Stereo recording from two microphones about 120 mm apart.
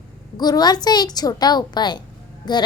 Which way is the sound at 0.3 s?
35° left (ahead or behind).